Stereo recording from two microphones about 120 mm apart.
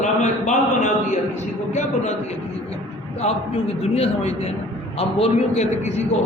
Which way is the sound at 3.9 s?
55° left (ahead or behind).